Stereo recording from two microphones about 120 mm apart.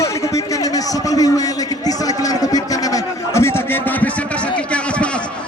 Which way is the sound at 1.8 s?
30° left (ahead or behind).